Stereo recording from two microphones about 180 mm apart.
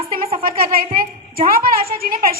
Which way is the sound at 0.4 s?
55° right (ahead or behind).